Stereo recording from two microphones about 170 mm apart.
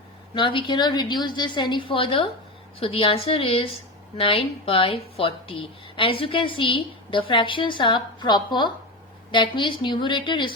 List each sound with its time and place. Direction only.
0.3 s a woman's voice: 30° left (ahead or behind)